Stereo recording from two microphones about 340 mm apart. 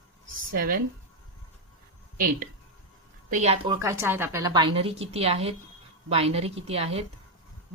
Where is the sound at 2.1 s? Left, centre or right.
Right.